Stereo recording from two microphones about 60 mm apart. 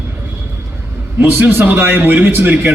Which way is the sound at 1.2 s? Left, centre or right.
Right.